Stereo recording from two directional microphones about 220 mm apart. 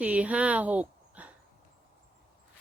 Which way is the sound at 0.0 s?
5° right (ahead or behind).